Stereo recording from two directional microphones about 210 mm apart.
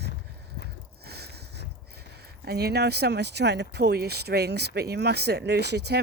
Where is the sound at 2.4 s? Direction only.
50° right (ahead or behind).